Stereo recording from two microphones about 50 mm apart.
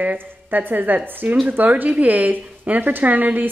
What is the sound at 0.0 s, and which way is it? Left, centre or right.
A woman's voice, right.